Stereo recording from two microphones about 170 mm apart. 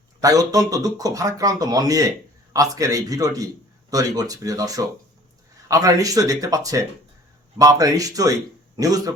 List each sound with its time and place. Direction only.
0.2 s a man's voice: 20° right (ahead or behind)